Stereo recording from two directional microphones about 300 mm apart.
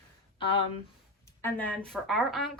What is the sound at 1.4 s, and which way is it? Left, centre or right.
A woman's voice, centre.